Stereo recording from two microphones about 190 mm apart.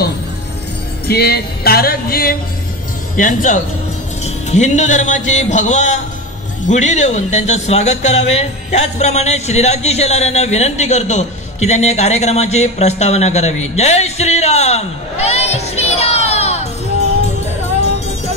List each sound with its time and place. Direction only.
1.0 s music: 55° left (ahead or behind)
4.2 s speech: 35° left (ahead or behind)
13.7 s a sound: 35° left (ahead or behind)